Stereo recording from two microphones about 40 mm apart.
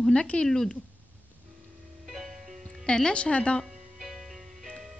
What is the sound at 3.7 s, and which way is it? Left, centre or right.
Music, centre.